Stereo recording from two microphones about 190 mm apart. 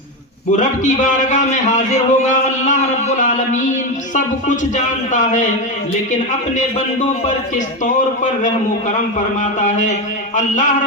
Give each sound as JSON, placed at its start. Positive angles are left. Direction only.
{"t": 0.5, "sound": "a man's voice", "side_deg": 40}
{"t": 7.9, "sound": "a man's voice", "side_deg": 40}